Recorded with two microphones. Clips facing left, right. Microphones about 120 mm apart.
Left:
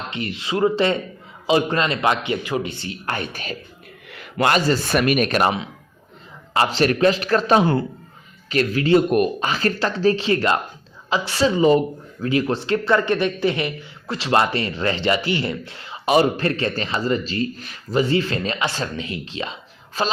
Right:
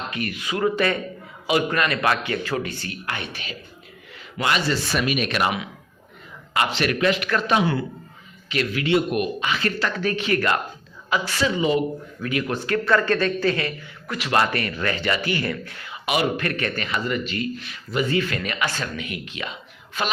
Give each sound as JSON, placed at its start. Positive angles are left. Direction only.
{"t": 0.1, "sound": "a man's voice", "side_deg": 25}
{"t": 3.1, "sound": "speech", "side_deg": 40}
{"t": 4.1, "sound": "a man's voice", "side_deg": 60}